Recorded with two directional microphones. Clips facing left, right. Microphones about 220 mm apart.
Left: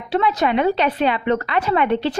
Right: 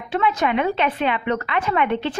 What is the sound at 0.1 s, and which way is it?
Speech, 35° left (ahead or behind).